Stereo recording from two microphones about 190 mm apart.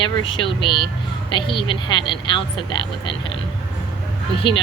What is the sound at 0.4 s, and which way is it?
Speech, 25° left (ahead or behind).